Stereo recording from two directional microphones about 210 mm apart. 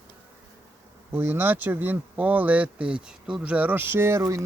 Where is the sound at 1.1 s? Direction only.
10° right (ahead or behind).